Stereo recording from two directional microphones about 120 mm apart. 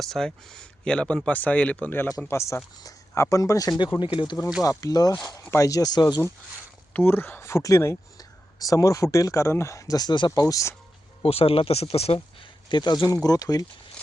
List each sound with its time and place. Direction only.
0.0 s speech: 5° left (ahead or behind); by 4.0 s 30° left (ahead or behind)
4.0 s speech: 45° left (ahead or behind)
4.6 s speech: 30° left (ahead or behind)
6.9 s speech: 20° left (ahead or behind); by 10.4 s 40° left (ahead or behind)
10.4 s speech: 25° left (ahead or behind)
11.2 s speech: 55° left (ahead or behind)
12.6 s speech: 40° left (ahead or behind)